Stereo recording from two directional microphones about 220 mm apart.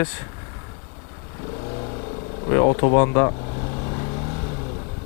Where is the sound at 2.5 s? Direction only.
20° left (ahead or behind).